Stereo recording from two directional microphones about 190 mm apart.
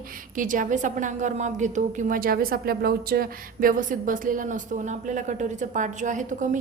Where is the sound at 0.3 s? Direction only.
45° right (ahead or behind).